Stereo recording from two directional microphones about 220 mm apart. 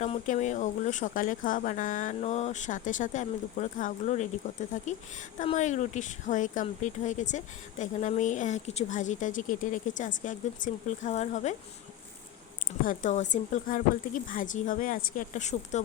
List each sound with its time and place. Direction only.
0.0 s speech: 30° left (ahead or behind)
12.8 s speech: 35° left (ahead or behind)